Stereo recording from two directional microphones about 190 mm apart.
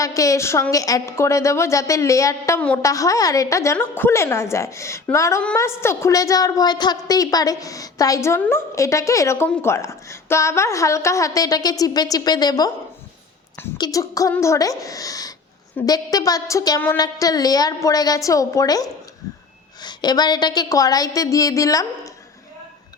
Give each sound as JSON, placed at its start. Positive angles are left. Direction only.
{"t": 0.0, "sound": "a woman's voice", "side_deg": 15}
{"t": 13.7, "sound": "a woman's voice", "side_deg": 20}